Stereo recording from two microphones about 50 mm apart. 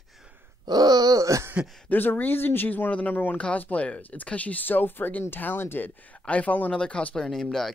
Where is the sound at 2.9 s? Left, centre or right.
Left.